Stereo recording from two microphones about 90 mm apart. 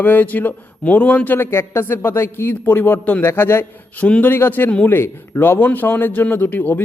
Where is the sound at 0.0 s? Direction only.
20° left (ahead or behind).